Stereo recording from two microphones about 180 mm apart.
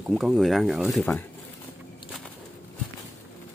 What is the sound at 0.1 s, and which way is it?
Speech, centre (ahead or behind).